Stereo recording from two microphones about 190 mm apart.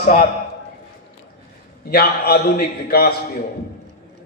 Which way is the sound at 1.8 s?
55° left (ahead or behind).